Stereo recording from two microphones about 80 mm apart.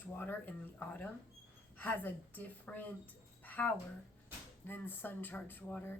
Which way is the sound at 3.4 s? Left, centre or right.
Left.